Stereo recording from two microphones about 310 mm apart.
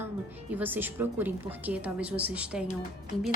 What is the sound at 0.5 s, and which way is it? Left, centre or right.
A woman's voice, centre.